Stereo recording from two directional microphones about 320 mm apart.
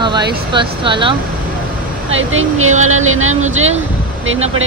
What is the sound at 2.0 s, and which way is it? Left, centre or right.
Speech, right.